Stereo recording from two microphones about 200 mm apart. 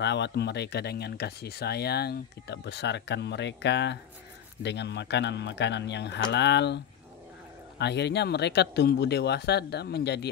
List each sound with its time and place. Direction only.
0.0 s speech: 60° left (ahead or behind)
7.8 s speech: 60° left (ahead or behind)